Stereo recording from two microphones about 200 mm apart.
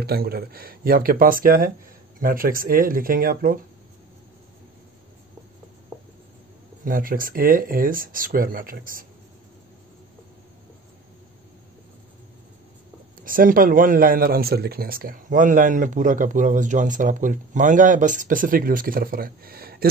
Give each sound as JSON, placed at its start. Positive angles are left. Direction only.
{"t": 0.0, "sound": "speech", "side_deg": -50}
{"t": 6.8, "sound": "speech", "side_deg": -45}
{"t": 13.2, "sound": "speech", "side_deg": -45}